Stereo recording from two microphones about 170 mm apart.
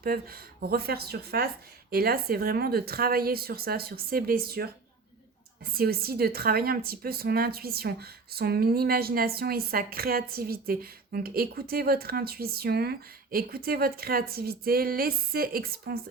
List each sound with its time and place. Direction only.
0.0 s speech: 60° right (ahead or behind)
5.7 s speech: 65° right (ahead or behind)